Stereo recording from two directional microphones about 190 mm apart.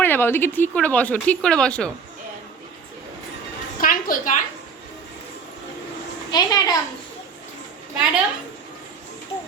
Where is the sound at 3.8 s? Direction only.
45° left (ahead or behind).